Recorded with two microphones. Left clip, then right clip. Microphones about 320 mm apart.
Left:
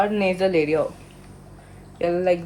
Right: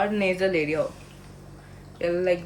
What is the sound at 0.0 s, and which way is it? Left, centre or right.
Speech, centre.